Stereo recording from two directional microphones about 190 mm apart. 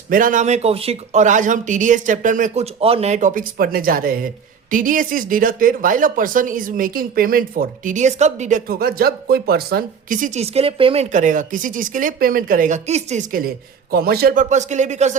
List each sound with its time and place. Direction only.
0.1 s speech: 45° right (ahead or behind)